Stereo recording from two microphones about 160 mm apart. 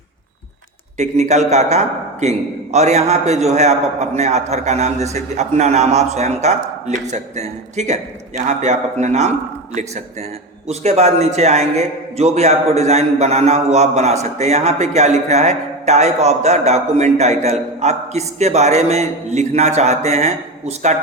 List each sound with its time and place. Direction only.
0.9 s a man's voice: 45° right (ahead or behind)